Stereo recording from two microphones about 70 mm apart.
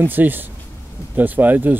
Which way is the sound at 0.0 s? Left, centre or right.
Right.